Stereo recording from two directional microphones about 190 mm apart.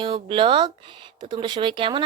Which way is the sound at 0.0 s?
25° right (ahead or behind).